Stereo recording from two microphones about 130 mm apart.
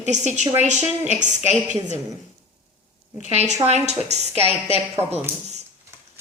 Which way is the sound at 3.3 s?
55° right (ahead or behind).